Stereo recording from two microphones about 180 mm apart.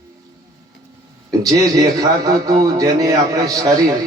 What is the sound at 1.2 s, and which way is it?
A man's voice, 20° right (ahead or behind).